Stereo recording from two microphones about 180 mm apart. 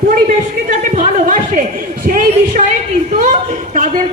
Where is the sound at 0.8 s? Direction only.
45° right (ahead or behind).